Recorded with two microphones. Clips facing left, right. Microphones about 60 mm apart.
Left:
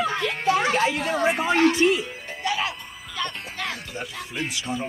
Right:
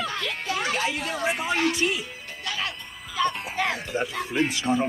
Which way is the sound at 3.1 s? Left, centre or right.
Centre.